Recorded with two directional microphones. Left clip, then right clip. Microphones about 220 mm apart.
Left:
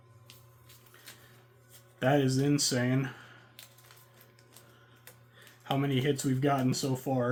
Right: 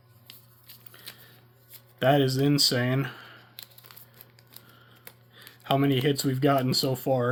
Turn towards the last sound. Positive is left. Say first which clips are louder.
# right 6 dB
turn(degrees=-50)  # may be behind; listen again after turning